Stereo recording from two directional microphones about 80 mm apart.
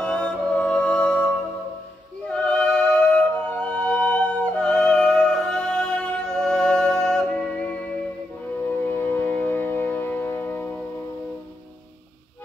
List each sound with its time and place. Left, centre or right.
0.0 s music: centre
2.2 s music: centre